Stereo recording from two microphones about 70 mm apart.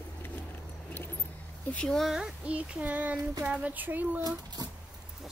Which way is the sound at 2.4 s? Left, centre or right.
Centre.